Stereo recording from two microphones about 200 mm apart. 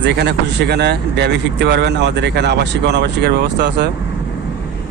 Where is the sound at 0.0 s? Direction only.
55° right (ahead or behind).